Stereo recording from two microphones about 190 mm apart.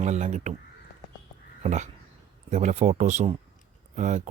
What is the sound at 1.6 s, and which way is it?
Speech, 35° right (ahead or behind).